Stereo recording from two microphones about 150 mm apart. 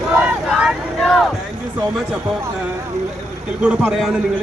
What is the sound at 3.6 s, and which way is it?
Speech, 10° right (ahead or behind).